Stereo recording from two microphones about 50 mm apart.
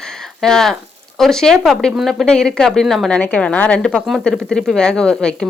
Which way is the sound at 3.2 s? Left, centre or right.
Left.